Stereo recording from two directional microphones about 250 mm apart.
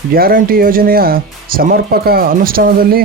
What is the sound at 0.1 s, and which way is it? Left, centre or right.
Speech, right.